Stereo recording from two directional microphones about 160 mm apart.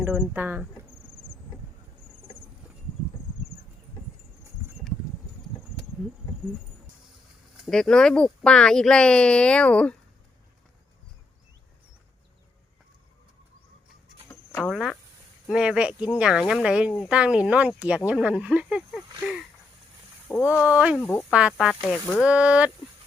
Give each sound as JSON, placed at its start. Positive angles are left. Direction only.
{"t": 0.0, "sound": "speech", "side_deg": -10}
{"t": 1.1, "sound": "insect", "side_deg": 35}
{"t": 7.5, "sound": "speech", "side_deg": 0}
{"t": 14.6, "sound": "speech", "side_deg": 0}
{"t": 20.5, "sound": "speech", "side_deg": -10}
{"t": 20.9, "sound": "speech", "side_deg": 10}
{"t": 21.2, "sound": "speech", "side_deg": -5}
{"t": 22.2, "sound": "speech", "side_deg": -5}